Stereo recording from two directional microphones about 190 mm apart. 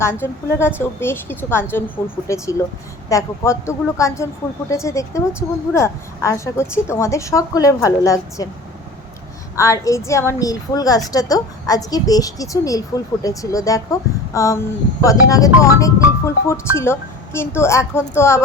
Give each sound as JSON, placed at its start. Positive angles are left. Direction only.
{"t": 0.0, "sound": "a woman's voice", "side_deg": 15}
{"t": 9.6, "sound": "a woman's voice", "side_deg": 15}